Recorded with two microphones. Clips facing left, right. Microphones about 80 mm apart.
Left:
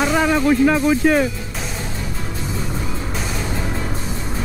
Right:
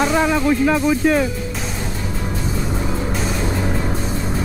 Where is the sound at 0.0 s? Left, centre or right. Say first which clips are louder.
Even; centre.